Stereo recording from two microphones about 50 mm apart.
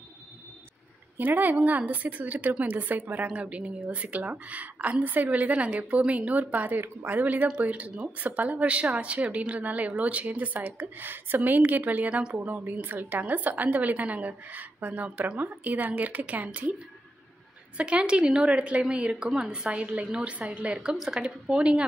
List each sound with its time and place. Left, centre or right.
1.1 s a woman's voice: right
12.1 s a woman's voice: centre
12.4 s a woman's voice: right
17.7 s a woman's voice: right